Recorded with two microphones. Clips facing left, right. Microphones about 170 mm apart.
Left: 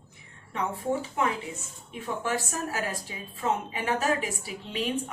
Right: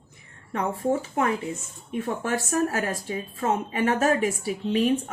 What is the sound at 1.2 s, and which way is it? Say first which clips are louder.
A woman's voice: right 4 dB; 45° right (ahead or behind).